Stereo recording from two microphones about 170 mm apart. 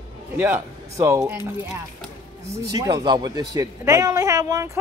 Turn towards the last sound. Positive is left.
turn(degrees=-20)  # may be behind; listen again after turning